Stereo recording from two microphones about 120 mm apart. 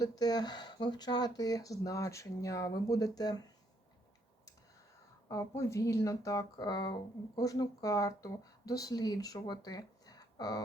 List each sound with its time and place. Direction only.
0.0 s speech: 35° left (ahead or behind)
5.3 s speech: 25° left (ahead or behind)